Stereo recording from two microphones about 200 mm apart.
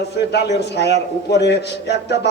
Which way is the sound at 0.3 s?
60° left (ahead or behind).